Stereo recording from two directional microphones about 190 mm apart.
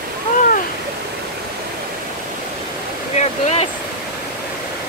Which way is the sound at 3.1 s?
35° left (ahead or behind).